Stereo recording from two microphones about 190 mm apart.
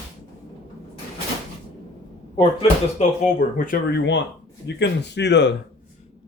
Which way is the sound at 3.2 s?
45° left (ahead or behind).